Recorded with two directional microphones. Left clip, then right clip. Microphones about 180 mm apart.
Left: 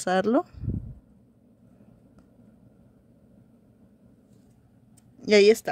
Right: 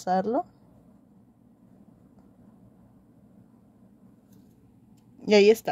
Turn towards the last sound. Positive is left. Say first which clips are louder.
# left 1 dB
turn(degrees=15)  # may be behind; listen again after turning